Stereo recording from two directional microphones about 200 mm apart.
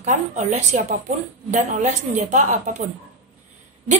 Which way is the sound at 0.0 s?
40° right (ahead or behind).